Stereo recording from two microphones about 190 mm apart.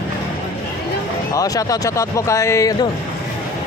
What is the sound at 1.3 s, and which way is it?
A man's voice, 20° left (ahead or behind).